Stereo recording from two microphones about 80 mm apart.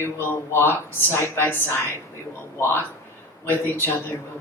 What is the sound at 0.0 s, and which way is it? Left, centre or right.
A man's voice, left.